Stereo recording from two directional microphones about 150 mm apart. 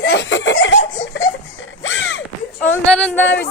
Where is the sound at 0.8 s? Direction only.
65° left (ahead or behind).